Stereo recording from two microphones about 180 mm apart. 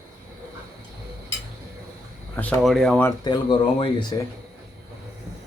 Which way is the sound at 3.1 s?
25° left (ahead or behind).